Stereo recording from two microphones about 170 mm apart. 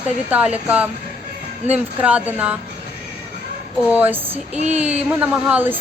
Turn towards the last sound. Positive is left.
turn(degrees=-10)  # may be behind; listen again after turning